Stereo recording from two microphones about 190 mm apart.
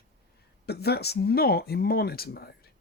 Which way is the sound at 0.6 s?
55° left (ahead or behind).